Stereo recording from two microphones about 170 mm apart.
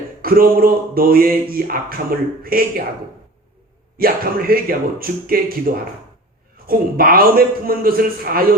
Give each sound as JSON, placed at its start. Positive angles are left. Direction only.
{"t": 0.2, "sound": "speech", "side_deg": -60}
{"t": 3.9, "sound": "speech", "side_deg": -60}